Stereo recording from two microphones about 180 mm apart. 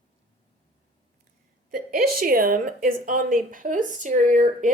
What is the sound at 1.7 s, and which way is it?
A woman's voice, 55° right (ahead or behind).